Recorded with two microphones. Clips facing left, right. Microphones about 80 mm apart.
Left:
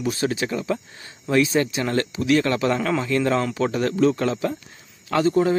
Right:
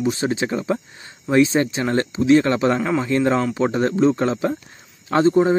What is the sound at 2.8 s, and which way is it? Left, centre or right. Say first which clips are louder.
Speech: right 2 dB; centre.